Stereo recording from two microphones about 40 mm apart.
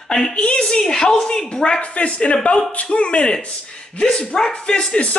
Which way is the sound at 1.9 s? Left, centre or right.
Left.